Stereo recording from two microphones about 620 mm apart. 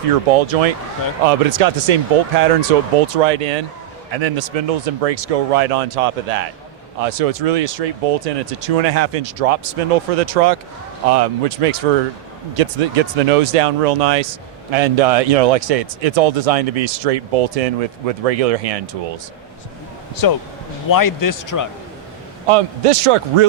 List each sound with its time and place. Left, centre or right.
0.1 s speech: right
4.1 s speech: right
20.2 s a man's voice: left
22.4 s a man's voice: right